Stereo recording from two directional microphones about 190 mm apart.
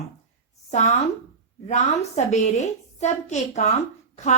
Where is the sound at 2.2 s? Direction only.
35° left (ahead or behind).